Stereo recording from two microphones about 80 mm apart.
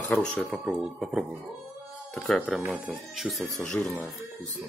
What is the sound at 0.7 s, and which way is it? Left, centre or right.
Speech, centre.